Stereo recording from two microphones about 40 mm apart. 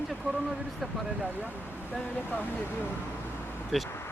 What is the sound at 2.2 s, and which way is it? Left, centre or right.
Speech, left.